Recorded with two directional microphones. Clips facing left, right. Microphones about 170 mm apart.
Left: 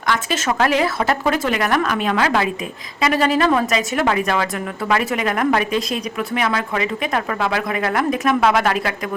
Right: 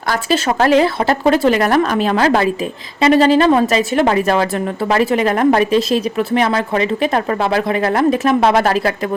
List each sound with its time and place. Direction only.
0.1 s speech: 35° right (ahead or behind)